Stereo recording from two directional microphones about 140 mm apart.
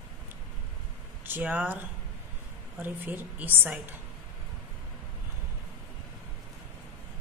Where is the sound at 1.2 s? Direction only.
15° right (ahead or behind).